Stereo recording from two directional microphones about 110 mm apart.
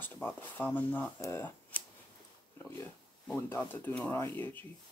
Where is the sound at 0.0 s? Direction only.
20° left (ahead or behind).